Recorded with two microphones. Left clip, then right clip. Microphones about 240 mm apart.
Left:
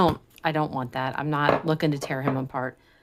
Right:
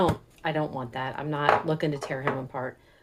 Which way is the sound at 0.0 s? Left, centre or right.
Left.